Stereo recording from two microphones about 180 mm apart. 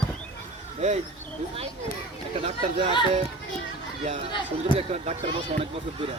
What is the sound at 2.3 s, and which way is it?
Speech, 30° right (ahead or behind).